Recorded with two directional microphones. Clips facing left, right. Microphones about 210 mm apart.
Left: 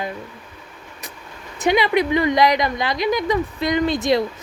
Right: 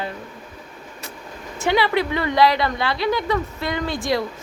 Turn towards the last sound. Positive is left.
turn(degrees=20)  # may be behind; listen again after turning